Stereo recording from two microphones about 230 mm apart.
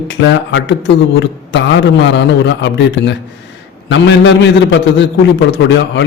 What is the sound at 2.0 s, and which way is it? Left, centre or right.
Speech, left.